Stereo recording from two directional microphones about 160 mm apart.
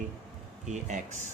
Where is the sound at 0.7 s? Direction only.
50° right (ahead or behind).